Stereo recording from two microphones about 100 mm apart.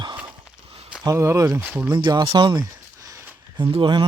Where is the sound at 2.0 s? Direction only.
45° right (ahead or behind).